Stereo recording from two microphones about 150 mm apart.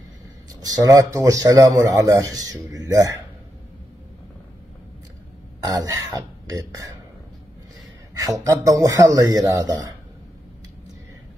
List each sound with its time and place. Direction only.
0.6 s a man's voice: 25° right (ahead or behind)
5.6 s a man's voice: 25° right (ahead or behind)
8.1 s a man's voice: 25° right (ahead or behind)